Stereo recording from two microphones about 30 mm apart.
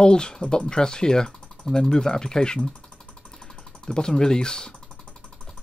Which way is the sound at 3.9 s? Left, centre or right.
Left.